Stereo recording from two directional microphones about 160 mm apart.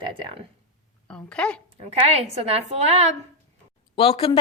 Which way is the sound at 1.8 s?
40° right (ahead or behind).